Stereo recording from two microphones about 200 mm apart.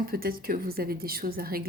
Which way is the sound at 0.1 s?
45° right (ahead or behind).